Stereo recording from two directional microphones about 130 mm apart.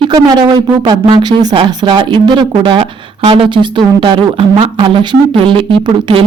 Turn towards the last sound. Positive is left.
turn(degrees=-40)  # may be behind; listen again after turning